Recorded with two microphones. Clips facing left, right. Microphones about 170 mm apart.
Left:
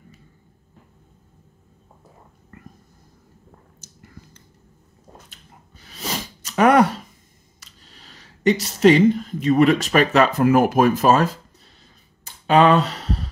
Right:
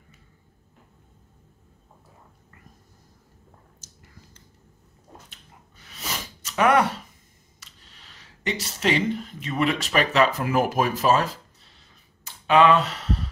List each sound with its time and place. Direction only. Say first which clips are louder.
6.4 s a sound: left 5 dB; 40° left (ahead or behind)
7.6 s speech: left 4 dB; 40° left (ahead or behind)
12.4 s speech: left 3 dB; 35° left (ahead or behind)